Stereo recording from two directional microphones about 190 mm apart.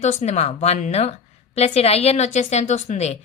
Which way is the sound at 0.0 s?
40° left (ahead or behind).